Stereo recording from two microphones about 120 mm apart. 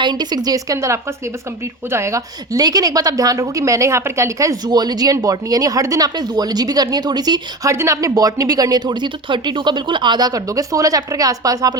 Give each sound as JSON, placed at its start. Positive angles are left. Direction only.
{"t": 0.0, "sound": "a woman's voice", "side_deg": -35}